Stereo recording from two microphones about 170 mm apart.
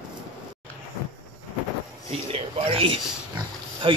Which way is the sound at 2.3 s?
35° right (ahead or behind).